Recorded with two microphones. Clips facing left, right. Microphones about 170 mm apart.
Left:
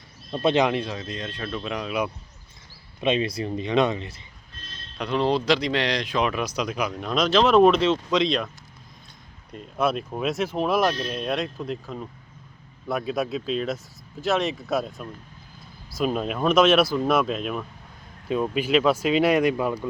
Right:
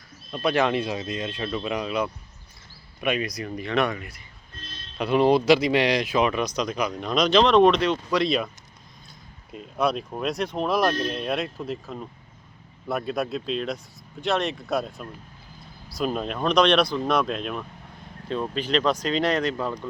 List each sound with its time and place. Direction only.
0.3 s speech: 20° left (ahead or behind)
0.7 s speech: 10° right (ahead or behind)
3.0 s speech: 25° left (ahead or behind)
4.9 s speech: 10° right (ahead or behind)
7.8 s speech: 25° left (ahead or behind)
9.5 s speech: centre (ahead or behind)